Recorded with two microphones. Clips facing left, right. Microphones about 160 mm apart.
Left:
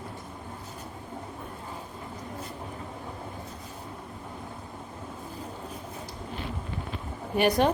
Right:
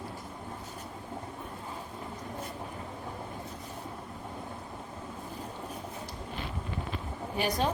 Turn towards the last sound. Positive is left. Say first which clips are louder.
# left 7 dB
turn(degrees=65)  # may be behind; listen again after turning